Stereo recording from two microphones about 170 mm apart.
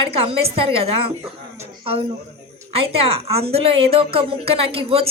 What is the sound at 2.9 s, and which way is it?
A woman's voice, 35° right (ahead or behind).